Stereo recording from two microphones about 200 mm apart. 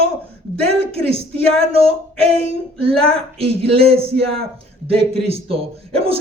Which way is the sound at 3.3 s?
30° right (ahead or behind).